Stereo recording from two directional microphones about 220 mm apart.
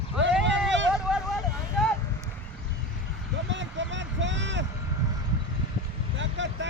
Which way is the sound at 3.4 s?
55° right (ahead or behind).